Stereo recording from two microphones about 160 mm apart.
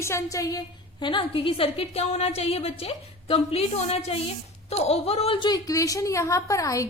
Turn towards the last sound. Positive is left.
turn(degrees=20)  # may be behind; listen again after turning